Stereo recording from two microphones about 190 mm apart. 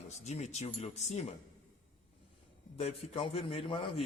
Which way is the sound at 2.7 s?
35° left (ahead or behind).